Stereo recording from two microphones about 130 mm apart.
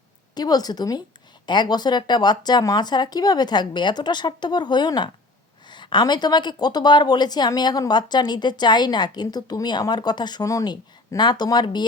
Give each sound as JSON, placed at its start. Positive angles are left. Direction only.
{"t": 0.3, "sound": "a woman's voice", "side_deg": 30}